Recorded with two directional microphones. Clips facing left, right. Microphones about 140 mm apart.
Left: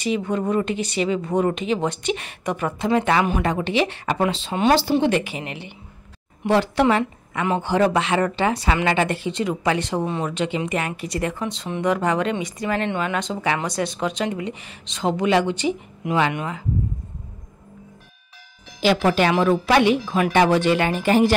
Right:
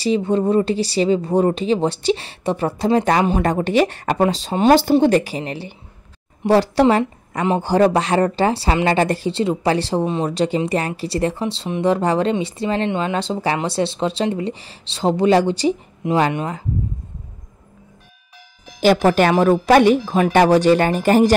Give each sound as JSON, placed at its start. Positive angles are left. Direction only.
{"t": 0.0, "sound": "a woman's voice", "side_deg": -30}
{"t": 10.0, "sound": "speech", "side_deg": -20}
{"t": 10.3, "sound": "speech", "side_deg": -35}
{"t": 18.8, "sound": "speech", "side_deg": -45}